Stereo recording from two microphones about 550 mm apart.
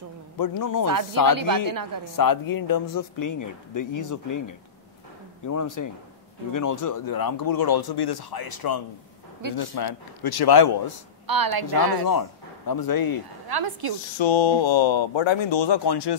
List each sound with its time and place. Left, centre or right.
0.4 s a man's voice: left
1.4 s speech: right
2.1 s a man's voice: left
5.5 s a man's voice: left
11.2 s speech: right
11.6 s a man's voice: left
13.5 s speech: right
14.1 s speech: left